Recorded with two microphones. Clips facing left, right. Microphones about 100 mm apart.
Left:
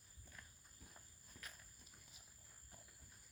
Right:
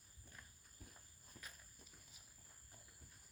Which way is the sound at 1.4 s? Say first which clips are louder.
Even; 45° right (ahead or behind).